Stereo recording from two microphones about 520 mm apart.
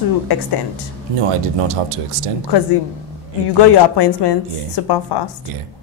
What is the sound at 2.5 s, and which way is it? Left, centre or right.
A woman's voice, left.